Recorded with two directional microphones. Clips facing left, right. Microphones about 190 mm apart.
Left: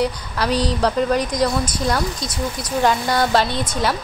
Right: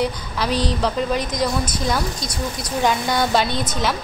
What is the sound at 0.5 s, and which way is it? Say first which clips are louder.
Speech: left 2 dB; 35° left (ahead or behind).